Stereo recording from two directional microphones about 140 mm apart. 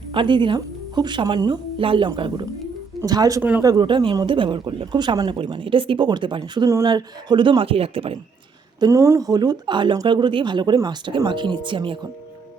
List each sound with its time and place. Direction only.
0.1 s speech: 35° right (ahead or behind)
3.0 s speech: 25° right (ahead or behind); by 8.1 s 40° right (ahead or behind)
8.8 s speech: 20° right (ahead or behind)